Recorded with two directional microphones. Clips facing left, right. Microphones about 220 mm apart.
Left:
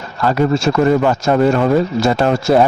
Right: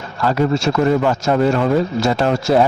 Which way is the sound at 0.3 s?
55° left (ahead or behind).